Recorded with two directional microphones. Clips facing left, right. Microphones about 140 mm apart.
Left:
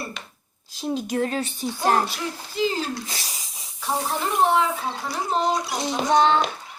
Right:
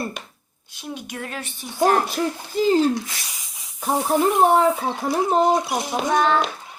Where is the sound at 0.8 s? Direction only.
35° left (ahead or behind).